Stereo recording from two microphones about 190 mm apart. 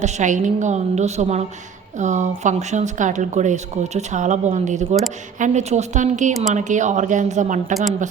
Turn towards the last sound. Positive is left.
turn(degrees=-40)  # may be behind; listen again after turning